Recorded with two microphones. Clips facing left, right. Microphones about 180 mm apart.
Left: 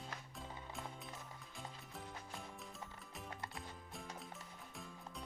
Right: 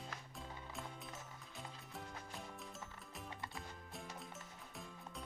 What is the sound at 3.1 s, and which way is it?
Music, centre (ahead or behind).